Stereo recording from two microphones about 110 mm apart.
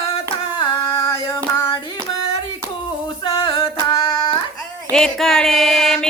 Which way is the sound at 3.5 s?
30° left (ahead or behind).